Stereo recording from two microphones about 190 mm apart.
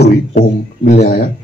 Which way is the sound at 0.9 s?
35° left (ahead or behind).